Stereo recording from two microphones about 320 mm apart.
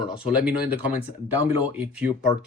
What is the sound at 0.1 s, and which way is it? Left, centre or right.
Speech, centre.